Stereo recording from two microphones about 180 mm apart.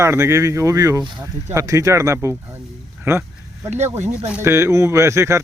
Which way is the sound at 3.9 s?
40° right (ahead or behind).